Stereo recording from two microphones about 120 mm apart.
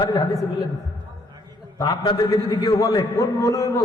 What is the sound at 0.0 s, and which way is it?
Speech, 35° left (ahead or behind).